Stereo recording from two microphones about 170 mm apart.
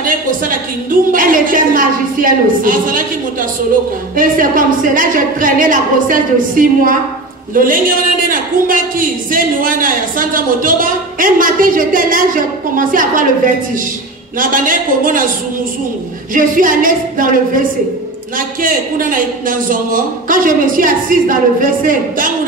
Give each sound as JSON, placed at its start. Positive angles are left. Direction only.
{"t": 0.0, "sound": "a sound", "side_deg": -55}
{"t": 1.1, "sound": "speech", "side_deg": -55}
{"t": 4.2, "sound": "speech", "side_deg": -55}
{"t": 14.4, "sound": "speech", "side_deg": -50}
{"t": 16.3, "sound": "speech", "side_deg": -55}